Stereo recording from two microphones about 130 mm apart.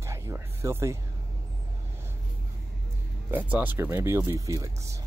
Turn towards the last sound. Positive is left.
turn(degrees=-25)  # may be behind; listen again after turning